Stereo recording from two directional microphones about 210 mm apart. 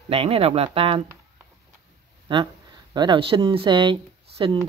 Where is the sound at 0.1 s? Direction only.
30° right (ahead or behind).